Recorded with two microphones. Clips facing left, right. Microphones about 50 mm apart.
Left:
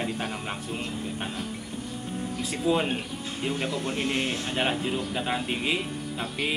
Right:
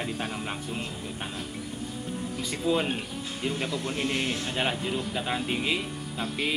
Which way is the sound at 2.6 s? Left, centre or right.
Centre.